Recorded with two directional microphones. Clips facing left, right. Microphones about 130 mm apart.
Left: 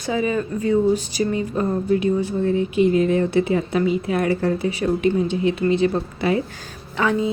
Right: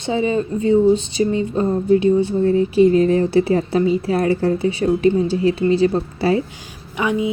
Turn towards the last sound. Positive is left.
turn(degrees=-15)  # may be behind; listen again after turning